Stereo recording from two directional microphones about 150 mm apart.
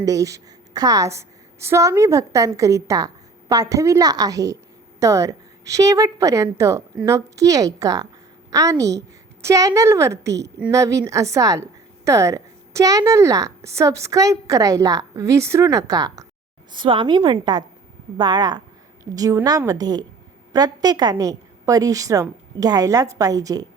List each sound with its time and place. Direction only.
0.0 s a woman's voice: 20° right (ahead or behind)